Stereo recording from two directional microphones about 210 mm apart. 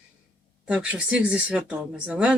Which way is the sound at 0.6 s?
5° right (ahead or behind).